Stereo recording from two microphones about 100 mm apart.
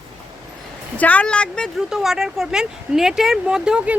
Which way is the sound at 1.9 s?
5° right (ahead or behind).